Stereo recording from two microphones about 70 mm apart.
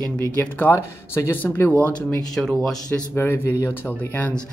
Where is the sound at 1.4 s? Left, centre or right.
Left.